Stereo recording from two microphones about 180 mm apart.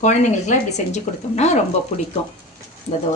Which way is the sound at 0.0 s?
40° left (ahead or behind).